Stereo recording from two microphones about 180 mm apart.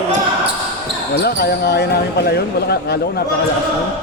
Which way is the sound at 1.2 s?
60° left (ahead or behind).